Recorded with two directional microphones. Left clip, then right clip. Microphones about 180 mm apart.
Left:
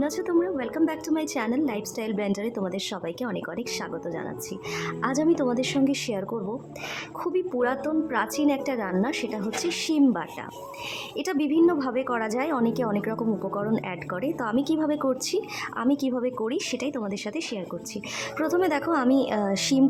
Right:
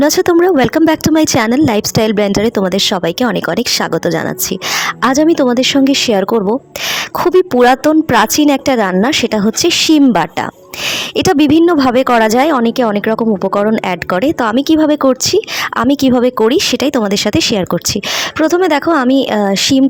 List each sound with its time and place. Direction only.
0.0 s speech: 55° right (ahead or behind)
18.3 s speech: 40° right (ahead or behind)